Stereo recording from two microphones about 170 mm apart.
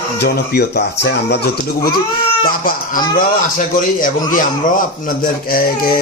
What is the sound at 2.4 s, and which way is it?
A man's voice, 55° left (ahead or behind).